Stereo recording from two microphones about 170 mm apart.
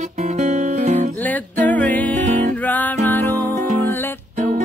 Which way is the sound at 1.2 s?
10° left (ahead or behind).